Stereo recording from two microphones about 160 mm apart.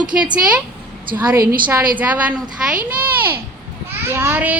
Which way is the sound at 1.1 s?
60° right (ahead or behind).